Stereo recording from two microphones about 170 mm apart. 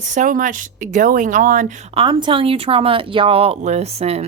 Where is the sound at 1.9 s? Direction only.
30° right (ahead or behind).